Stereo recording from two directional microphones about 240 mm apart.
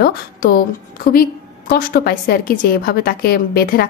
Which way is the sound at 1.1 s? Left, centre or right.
Left.